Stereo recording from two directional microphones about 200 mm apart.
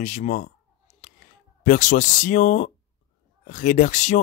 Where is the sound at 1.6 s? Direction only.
40° left (ahead or behind).